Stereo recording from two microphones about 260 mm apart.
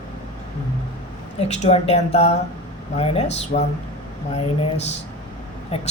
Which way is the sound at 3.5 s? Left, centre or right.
Left.